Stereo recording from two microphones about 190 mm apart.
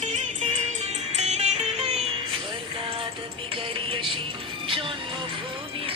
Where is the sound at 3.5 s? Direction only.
30° right (ahead or behind).